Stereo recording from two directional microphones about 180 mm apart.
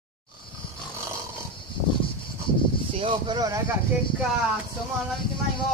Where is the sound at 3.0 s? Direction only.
25° right (ahead or behind).